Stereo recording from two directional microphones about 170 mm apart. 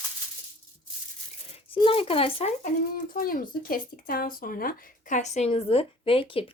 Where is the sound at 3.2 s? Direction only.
60° left (ahead or behind).